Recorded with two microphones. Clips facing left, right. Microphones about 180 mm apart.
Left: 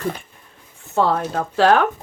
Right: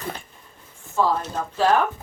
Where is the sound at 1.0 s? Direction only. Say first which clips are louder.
Left 3 dB; 70° left (ahead or behind).